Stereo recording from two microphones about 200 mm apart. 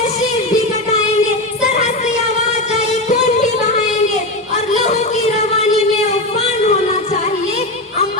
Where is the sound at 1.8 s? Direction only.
35° left (ahead or behind).